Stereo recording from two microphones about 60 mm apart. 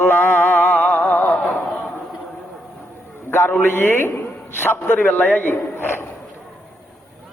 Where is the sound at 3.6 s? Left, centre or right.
Left.